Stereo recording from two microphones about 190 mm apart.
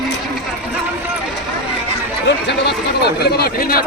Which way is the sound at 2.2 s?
65° left (ahead or behind).